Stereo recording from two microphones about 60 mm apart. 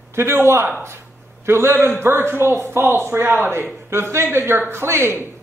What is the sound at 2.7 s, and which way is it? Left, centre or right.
A man's voice, right.